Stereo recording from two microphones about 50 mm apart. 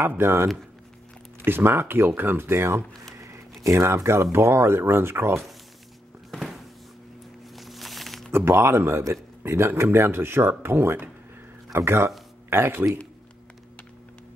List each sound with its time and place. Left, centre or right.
0.0 s speech: right
3.2 s speech: right
7.5 s a sound: centre
8.3 s speech: right